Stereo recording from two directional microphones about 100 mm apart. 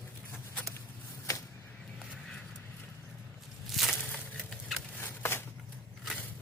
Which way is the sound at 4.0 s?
10° left (ahead or behind).